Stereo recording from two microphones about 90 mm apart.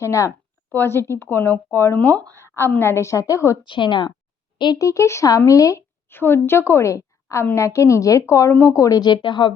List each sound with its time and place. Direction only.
0.0 s speech: 35° left (ahead or behind)
3.6 s a woman's voice: 60° left (ahead or behind)
4.8 s speech: 35° left (ahead or behind)
6.1 s a woman's voice: 25° left (ahead or behind); by 9.6 s 65° left (ahead or behind)